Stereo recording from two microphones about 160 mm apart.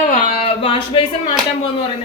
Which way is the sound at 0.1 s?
40° left (ahead or behind).